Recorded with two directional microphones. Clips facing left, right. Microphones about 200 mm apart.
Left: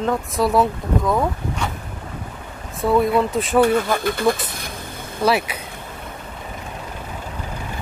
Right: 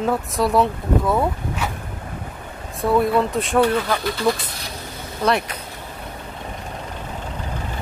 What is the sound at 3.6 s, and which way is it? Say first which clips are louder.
Speech: left 2 dB; 50° left (ahead or behind).